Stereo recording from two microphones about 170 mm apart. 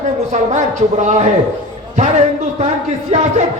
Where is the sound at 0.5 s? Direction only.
45° right (ahead or behind).